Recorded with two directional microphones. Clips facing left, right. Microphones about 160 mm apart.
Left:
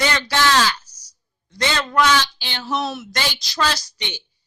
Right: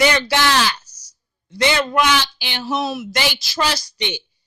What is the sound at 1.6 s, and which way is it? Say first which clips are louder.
A woman's voice: right 2 dB; 15° right (ahead or behind).